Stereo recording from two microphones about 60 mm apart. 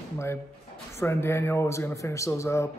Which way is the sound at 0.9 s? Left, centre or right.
Left.